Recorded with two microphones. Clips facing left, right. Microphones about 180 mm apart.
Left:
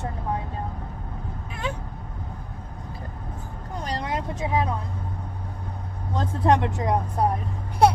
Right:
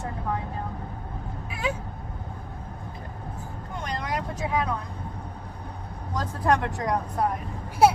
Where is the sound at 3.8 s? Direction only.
30° left (ahead or behind).